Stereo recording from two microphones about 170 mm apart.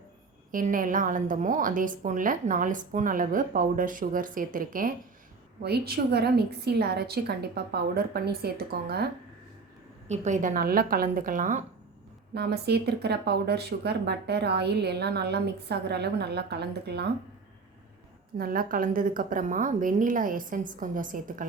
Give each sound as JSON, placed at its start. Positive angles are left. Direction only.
{"t": 0.5, "sound": "a woman's voice", "side_deg": -55}
{"t": 5.6, "sound": "speech", "side_deg": -70}
{"t": 10.1, "sound": "a woman's voice", "side_deg": -45}
{"t": 12.3, "sound": "speech", "side_deg": -75}
{"t": 18.3, "sound": "a woman's voice", "side_deg": -60}